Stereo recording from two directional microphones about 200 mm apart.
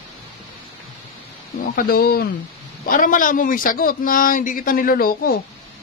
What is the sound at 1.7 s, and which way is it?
A man's voice, 50° left (ahead or behind).